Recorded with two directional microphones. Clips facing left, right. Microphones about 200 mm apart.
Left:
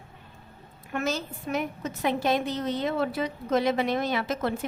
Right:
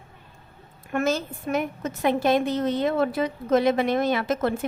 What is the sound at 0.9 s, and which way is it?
A woman's voice, 50° right (ahead or behind).